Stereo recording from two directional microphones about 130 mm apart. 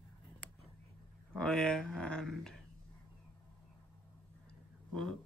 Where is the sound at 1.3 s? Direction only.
5° left (ahead or behind).